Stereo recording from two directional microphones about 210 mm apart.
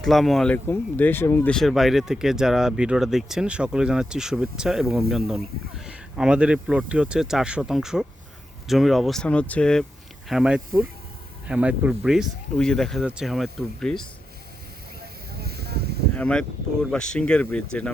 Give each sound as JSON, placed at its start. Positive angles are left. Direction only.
{"t": 0.0, "sound": "speech", "side_deg": 0}
{"t": 15.3, "sound": "a sound", "side_deg": -50}
{"t": 16.1, "sound": "speech", "side_deg": 5}